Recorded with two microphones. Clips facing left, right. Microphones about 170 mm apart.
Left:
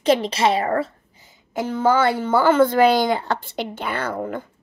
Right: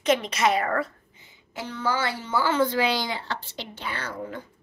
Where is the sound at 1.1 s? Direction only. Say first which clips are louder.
Left 11 dB; 45° left (ahead or behind).